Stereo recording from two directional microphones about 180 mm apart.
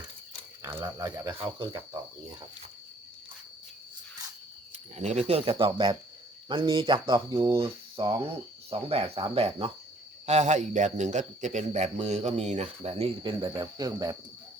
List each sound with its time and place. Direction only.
0.6 s a sound: 20° right (ahead or behind)
0.9 s speech: 20° right (ahead or behind)
4.9 s a man's voice: 40° right (ahead or behind)
13.6 s speech: 20° right (ahead or behind)